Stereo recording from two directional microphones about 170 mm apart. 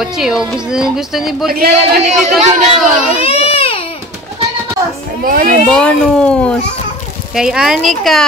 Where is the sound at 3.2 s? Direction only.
35° left (ahead or behind).